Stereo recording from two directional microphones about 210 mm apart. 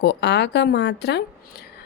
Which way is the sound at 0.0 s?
55° left (ahead or behind).